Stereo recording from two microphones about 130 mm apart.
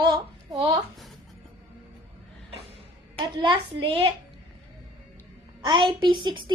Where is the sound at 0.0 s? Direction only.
35° right (ahead or behind).